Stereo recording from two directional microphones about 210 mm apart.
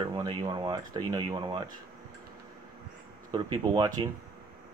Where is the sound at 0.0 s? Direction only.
20° right (ahead or behind).